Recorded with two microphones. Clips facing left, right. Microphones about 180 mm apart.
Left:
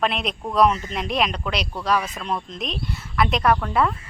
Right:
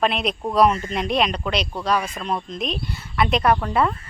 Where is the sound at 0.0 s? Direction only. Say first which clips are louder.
Right 2 dB; centre (ahead or behind).